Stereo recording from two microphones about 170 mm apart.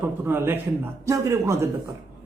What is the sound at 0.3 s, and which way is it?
A man's voice, 10° right (ahead or behind).